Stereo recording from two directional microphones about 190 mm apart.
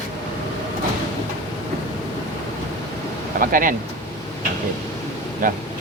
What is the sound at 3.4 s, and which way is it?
Speech, 45° right (ahead or behind).